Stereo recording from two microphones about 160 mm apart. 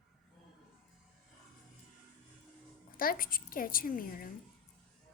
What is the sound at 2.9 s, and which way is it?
A woman's voice, 65° left (ahead or behind).